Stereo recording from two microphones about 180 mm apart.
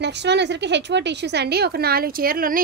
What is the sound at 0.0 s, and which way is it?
A woman's voice, 70° right (ahead or behind).